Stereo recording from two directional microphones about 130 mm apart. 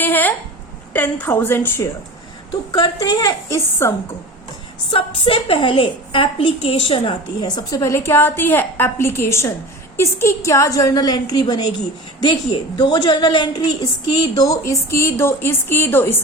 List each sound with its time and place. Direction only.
0.0 s a sound: 15° left (ahead or behind)
0.9 s a woman's voice: 15° left (ahead or behind)
2.7 s a woman's voice: 30° left (ahead or behind)
4.9 s a woman's voice: 45° left (ahead or behind); by 16.2 s 15° left (ahead or behind)